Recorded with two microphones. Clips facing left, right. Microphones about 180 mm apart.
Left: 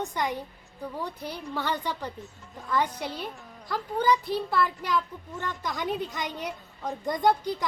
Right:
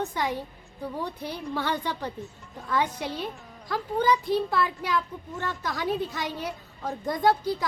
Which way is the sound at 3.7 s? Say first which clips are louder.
Right 1 dB; 10° right (ahead or behind).